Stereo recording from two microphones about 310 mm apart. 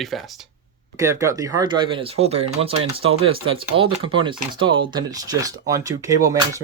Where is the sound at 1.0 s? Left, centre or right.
Centre.